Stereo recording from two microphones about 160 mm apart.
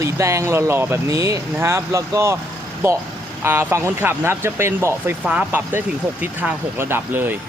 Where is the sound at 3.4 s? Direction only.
15° right (ahead or behind).